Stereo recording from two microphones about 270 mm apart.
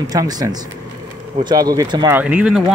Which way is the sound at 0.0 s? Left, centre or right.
Centre.